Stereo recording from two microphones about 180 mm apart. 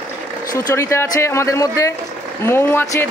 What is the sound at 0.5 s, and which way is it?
Speech, 15° left (ahead or behind).